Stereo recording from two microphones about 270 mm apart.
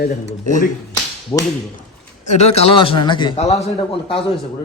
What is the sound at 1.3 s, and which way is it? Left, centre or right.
Speech, centre.